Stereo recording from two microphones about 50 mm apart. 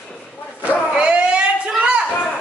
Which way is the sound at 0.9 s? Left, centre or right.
Centre.